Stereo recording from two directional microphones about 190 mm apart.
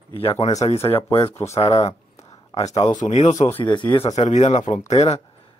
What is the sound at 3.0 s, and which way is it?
Speech, 35° left (ahead or behind).